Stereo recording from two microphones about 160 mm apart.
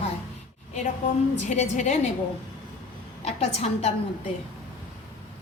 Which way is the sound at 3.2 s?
40° left (ahead or behind).